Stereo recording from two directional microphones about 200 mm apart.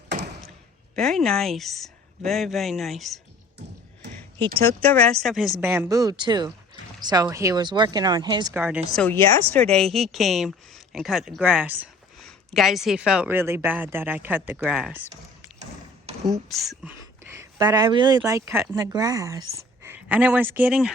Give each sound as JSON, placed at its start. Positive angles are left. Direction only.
{"t": 0.9, "sound": "speech", "side_deg": 0}
{"t": 4.6, "sound": "speech", "side_deg": 10}
{"t": 5.6, "sound": "speech", "side_deg": -10}
{"t": 8.5, "sound": "speech", "side_deg": -10}
{"t": 9.0, "sound": "speech", "side_deg": 10}
{"t": 16.6, "sound": "speech", "side_deg": -10}